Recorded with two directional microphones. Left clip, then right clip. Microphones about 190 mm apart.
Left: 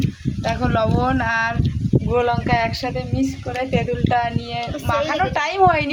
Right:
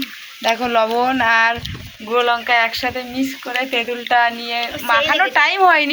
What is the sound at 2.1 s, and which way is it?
A woman's voice, centre (ahead or behind).